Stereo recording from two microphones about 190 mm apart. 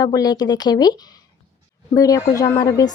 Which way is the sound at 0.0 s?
20° left (ahead or behind).